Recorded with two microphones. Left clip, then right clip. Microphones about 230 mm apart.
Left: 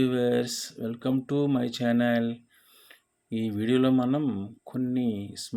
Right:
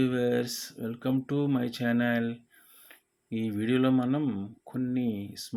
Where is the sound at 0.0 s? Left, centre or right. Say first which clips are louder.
Left 2 dB; centre.